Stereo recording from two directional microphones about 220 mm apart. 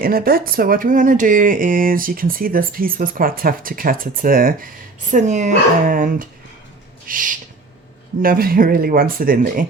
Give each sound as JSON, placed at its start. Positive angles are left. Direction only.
{"t": 0.0, "sound": "speech", "side_deg": -40}